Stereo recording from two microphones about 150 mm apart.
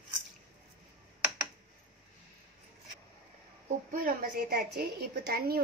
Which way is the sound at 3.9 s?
70° right (ahead or behind).